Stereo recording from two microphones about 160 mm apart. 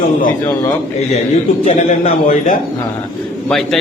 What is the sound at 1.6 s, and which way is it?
Speech, 45° left (ahead or behind).